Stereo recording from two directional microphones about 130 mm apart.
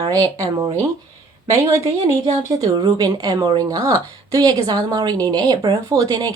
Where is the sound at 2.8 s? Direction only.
30° right (ahead or behind).